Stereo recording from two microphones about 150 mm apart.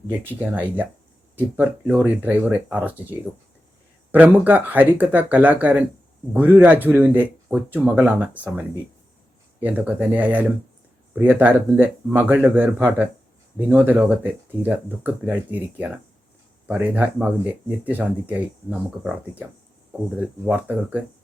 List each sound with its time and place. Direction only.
0.5 s speech: 10° right (ahead or behind)
9.6 s speech: 10° right (ahead or behind)
20.5 s speech: 10° right (ahead or behind)